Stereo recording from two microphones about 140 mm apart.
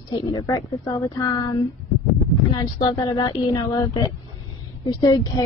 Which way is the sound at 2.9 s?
25° left (ahead or behind).